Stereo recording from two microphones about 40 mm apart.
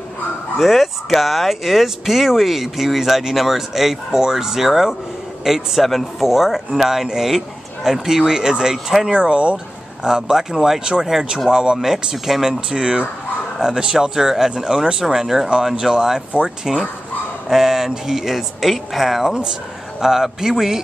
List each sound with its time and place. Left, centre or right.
0.6 s speech: centre
5.8 s speech: centre; by 9.6 s right
10.0 s speech: centre
15.4 s speech: centre
20.0 s speech: centre